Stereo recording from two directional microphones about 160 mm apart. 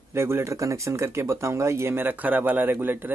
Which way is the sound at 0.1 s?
15° right (ahead or behind).